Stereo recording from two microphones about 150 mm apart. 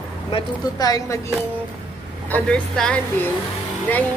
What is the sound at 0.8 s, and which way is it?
Speech, 25° left (ahead or behind).